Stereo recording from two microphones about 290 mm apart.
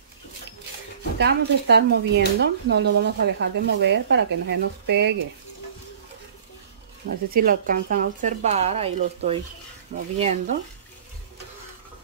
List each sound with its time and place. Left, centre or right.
1.1 s speech: right
7.2 s speech: right